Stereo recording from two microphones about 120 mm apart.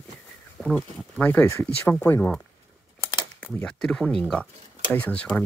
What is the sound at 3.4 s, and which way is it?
Speech, 10° left (ahead or behind).